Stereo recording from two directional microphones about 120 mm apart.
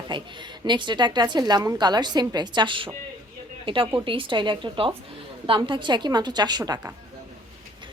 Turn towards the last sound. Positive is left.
turn(degrees=-35)  # may be behind; listen again after turning